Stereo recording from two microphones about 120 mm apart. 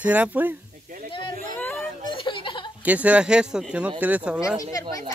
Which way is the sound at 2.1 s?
45° left (ahead or behind).